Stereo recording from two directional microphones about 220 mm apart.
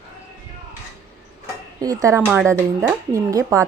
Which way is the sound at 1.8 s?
15° right (ahead or behind).